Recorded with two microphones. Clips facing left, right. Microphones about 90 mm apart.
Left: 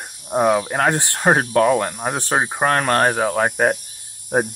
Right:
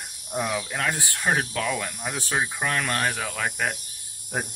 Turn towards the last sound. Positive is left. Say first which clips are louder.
# left 11 dB
turn(degrees=50)  # may be behind; listen again after turning